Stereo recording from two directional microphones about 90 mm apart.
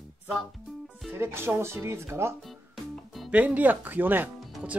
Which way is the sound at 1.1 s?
25° right (ahead or behind).